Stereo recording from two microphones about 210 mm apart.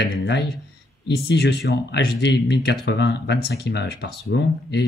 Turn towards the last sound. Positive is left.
turn(degrees=55)  # may be behind; listen again after turning